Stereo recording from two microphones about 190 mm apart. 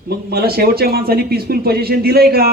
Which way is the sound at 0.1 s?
55° right (ahead or behind).